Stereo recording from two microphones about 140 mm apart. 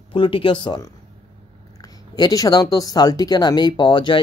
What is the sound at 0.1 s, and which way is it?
Speech, 35° left (ahead or behind).